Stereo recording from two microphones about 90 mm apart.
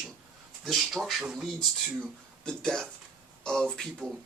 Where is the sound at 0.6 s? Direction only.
Centre (ahead or behind).